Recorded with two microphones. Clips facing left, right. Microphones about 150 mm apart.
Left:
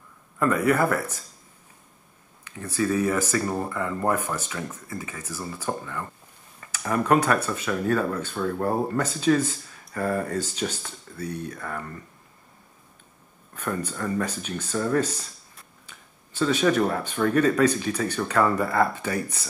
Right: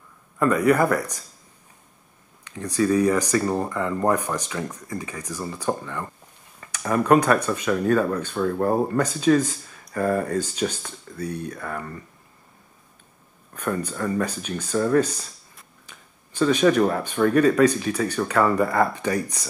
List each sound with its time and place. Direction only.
0.4 s speech: 15° right (ahead or behind)
2.6 s speech: 15° right (ahead or behind)
13.6 s speech: 10° right (ahead or behind)
16.3 s speech: 15° right (ahead or behind)